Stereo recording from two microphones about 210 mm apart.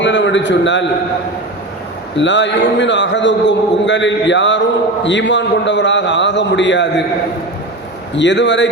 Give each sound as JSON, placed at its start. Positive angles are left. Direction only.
{"t": 0.0, "sound": "a man's voice", "side_deg": 60}
{"t": 2.1, "sound": "a man's voice", "side_deg": 60}
{"t": 8.1, "sound": "a man's voice", "side_deg": 60}